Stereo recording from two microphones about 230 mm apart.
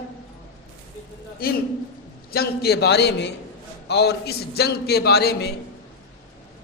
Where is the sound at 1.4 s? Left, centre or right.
Left.